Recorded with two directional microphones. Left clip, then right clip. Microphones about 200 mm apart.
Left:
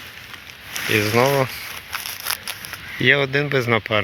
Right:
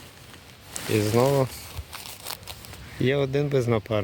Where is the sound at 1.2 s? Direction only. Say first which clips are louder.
Left 3 dB; 5° left (ahead or behind).